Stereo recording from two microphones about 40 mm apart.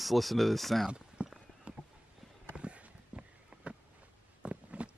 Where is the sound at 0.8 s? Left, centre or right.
Centre.